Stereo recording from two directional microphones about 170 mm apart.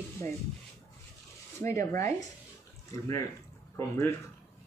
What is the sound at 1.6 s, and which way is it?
Speech, 15° left (ahead or behind).